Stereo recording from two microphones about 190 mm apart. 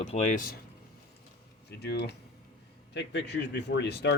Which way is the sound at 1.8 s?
60° left (ahead or behind).